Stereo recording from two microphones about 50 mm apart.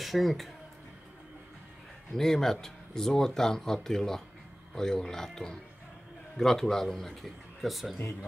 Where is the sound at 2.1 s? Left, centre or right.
Centre.